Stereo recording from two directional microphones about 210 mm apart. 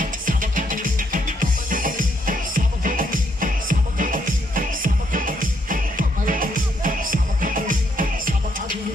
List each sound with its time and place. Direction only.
0.0 s music: 40° right (ahead or behind)